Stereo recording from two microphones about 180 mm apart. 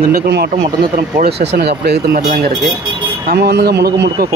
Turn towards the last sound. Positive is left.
turn(degrees=-65)  # may be behind; listen again after turning